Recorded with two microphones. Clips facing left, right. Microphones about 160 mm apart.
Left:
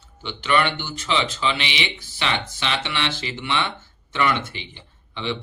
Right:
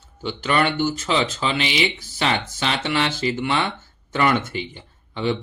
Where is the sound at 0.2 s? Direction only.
40° right (ahead or behind).